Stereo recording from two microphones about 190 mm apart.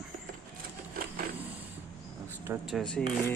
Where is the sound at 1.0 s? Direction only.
50° right (ahead or behind).